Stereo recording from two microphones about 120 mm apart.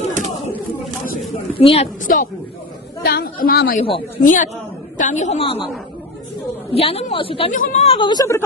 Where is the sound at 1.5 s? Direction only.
55° left (ahead or behind).